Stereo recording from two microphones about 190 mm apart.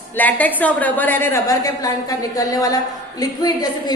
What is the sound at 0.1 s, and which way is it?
A woman's voice, 10° left (ahead or behind).